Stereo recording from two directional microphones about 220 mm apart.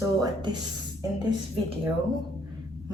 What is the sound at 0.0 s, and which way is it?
Speech, 15° right (ahead or behind).